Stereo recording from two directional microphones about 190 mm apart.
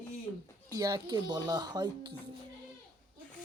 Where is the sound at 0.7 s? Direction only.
20° right (ahead or behind).